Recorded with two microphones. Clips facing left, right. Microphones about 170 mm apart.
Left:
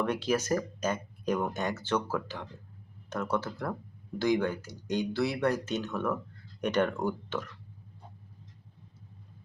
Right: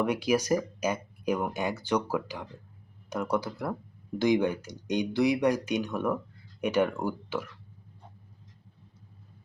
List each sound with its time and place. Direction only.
0.0 s speech: 10° right (ahead or behind)